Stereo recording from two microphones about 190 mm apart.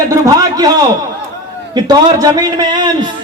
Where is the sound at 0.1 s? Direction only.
15° right (ahead or behind).